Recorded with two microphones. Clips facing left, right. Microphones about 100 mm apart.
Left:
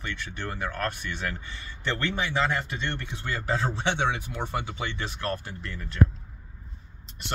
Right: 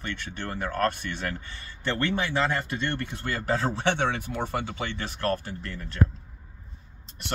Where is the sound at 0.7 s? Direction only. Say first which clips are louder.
Right 7 dB; 45° right (ahead or behind).